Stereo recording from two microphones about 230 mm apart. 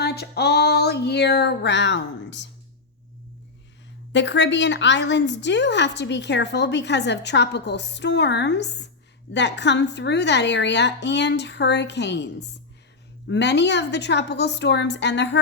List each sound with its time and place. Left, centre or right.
0.0 s a woman's voice: left
4.1 s a woman's voice: left